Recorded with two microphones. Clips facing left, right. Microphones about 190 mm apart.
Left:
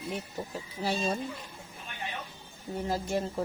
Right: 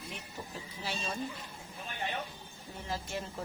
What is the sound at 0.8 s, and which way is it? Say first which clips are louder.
Speech: left 9 dB; 40° left (ahead or behind).